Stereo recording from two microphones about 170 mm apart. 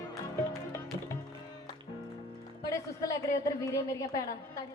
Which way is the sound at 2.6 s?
20° left (ahead or behind).